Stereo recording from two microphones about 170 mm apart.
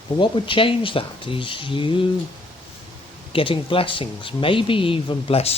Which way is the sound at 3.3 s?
30° left (ahead or behind).